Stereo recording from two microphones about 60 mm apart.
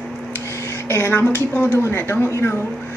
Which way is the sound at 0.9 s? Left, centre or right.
Left.